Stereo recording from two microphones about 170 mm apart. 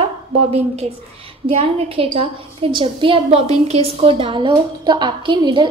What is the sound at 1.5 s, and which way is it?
A woman's voice, 35° right (ahead or behind).